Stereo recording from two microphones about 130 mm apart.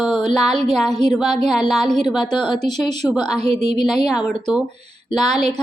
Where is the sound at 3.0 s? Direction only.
10° left (ahead or behind).